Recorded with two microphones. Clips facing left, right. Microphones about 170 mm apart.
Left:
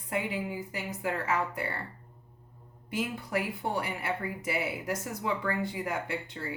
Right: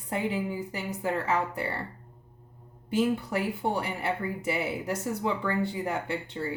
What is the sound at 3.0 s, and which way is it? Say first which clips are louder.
Speech: right 5 dB; 30° right (ahead or behind).